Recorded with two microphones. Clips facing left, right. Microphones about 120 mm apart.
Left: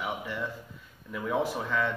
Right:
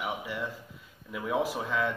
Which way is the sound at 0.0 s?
10° right (ahead or behind).